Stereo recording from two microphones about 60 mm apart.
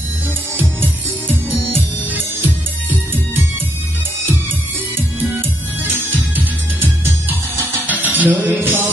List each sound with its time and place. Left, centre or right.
1.5 s music: right
5.9 s music: right